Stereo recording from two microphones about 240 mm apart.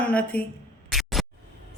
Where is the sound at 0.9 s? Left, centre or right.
Centre.